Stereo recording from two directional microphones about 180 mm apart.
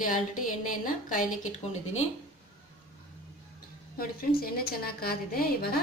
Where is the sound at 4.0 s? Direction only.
55° left (ahead or behind).